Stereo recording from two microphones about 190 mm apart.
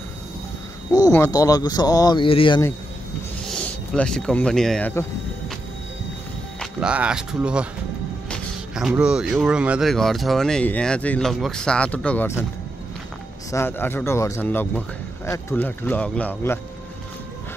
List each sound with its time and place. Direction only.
0.9 s speech: 15° left (ahead or behind)
3.4 s speech: 5° left (ahead or behind)
6.6 s speech: 5° right (ahead or behind); by 12.4 s 10° left (ahead or behind)
13.5 s speech: 10° left (ahead or behind)